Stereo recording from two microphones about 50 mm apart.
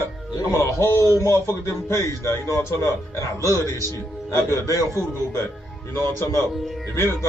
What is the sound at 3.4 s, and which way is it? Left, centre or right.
Speech, left.